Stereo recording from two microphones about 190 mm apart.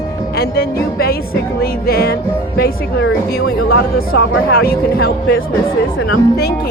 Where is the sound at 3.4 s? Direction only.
55° left (ahead or behind).